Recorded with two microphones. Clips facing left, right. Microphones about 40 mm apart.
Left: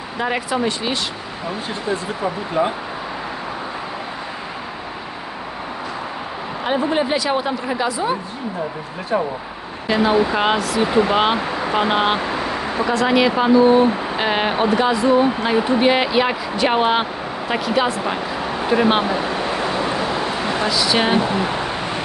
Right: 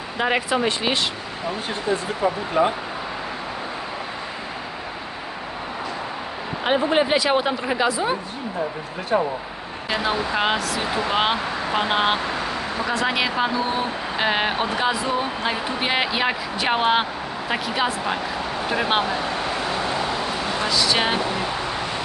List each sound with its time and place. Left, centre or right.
0.2 s speech: right
6.9 s speech: right
9.9 s speech: centre
12.9 s speech: centre
18.5 s a sound: centre
20.6 s speech: centre